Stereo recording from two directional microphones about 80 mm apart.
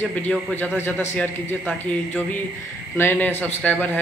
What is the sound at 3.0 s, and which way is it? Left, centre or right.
A man's voice, left.